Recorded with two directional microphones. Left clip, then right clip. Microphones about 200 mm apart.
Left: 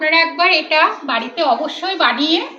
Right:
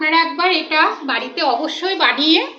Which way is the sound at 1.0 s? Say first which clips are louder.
Left 1 dB; 35° right (ahead or behind).